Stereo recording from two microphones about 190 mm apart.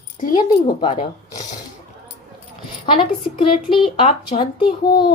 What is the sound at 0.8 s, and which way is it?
Speech, 25° left (ahead or behind).